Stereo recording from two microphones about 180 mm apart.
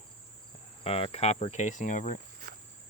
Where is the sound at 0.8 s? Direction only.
35° left (ahead or behind).